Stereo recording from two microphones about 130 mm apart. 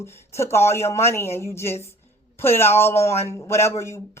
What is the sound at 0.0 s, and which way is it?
A woman's voice, 20° left (ahead or behind).